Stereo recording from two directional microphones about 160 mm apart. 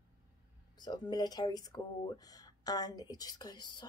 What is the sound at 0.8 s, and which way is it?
Speech, 25° left (ahead or behind).